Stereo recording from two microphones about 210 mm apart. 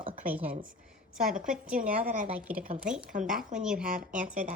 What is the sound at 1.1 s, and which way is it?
Speech, 5° right (ahead or behind).